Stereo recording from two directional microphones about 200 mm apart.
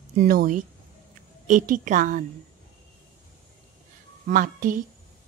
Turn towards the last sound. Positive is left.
turn(degrees=-45)  # may be behind; listen again after turning